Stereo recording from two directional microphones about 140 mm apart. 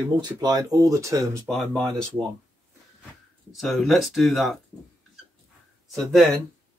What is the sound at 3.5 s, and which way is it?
Speech, centre (ahead or behind).